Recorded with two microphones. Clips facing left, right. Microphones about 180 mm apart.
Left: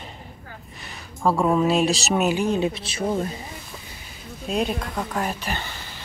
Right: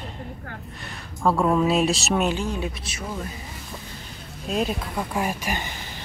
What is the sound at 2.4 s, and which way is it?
Speech, 25° left (ahead or behind).